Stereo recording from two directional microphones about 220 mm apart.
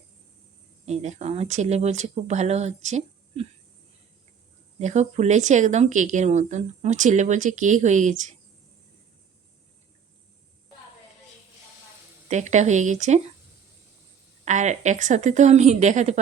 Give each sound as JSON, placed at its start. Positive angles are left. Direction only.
{"t": 0.9, "sound": "speech", "side_deg": -30}
{"t": 4.8, "sound": "speech", "side_deg": -30}
{"t": 12.3, "sound": "speech", "side_deg": -30}
{"t": 14.4, "sound": "speech", "side_deg": -30}